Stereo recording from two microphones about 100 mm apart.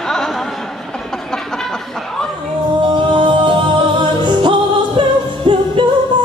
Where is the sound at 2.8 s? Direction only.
55° right (ahead or behind).